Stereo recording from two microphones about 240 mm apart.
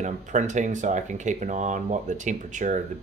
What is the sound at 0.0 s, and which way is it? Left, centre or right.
Speech, right.